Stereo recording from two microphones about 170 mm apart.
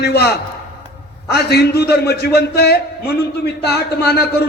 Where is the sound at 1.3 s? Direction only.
75° left (ahead or behind).